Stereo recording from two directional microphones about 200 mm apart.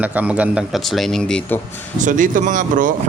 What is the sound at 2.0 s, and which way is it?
Speech, 40° right (ahead or behind).